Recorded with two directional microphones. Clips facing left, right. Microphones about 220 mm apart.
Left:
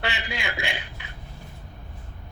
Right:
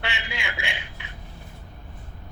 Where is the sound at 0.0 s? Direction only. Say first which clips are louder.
Left 3 dB; 40° left (ahead or behind).